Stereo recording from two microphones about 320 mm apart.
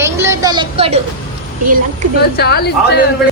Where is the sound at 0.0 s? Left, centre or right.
Centre.